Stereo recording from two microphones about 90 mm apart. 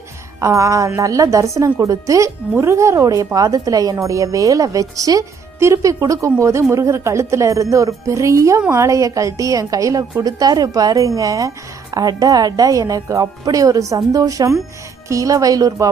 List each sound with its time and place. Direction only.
0.4 s a woman's voice: 35° right (ahead or behind)